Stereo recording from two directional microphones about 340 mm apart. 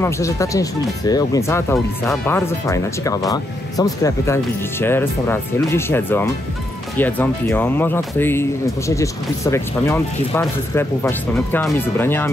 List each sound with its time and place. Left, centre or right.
0.0 s speech: centre